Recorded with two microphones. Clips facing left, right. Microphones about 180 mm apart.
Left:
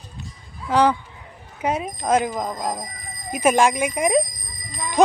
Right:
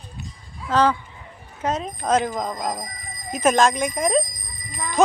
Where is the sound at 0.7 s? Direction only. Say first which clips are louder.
Left 1 dB; 10° left (ahead or behind).